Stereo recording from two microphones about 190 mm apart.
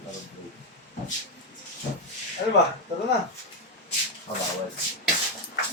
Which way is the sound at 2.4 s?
50° left (ahead or behind).